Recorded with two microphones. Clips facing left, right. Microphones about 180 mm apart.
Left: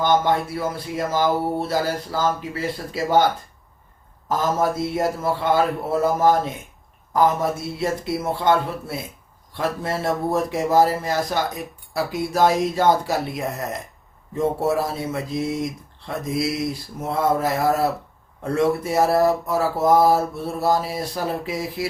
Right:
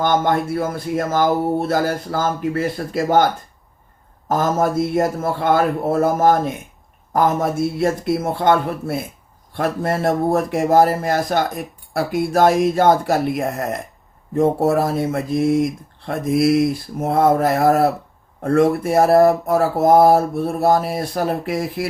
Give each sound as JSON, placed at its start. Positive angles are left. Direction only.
{"t": 0.0, "sound": "speech", "side_deg": -50}
{"t": 4.3, "sound": "speech", "side_deg": -50}
{"t": 7.8, "sound": "speech", "side_deg": -50}